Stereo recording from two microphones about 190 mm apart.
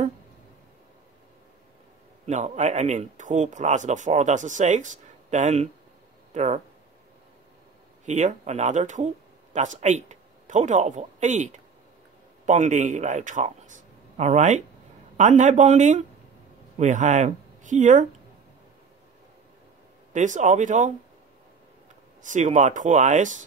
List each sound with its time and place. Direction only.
2.2 s speech: 40° right (ahead or behind)
8.0 s a man's voice: 40° right (ahead or behind)
20.1 s speech: 40° right (ahead or behind)
22.2 s speech: 40° right (ahead or behind)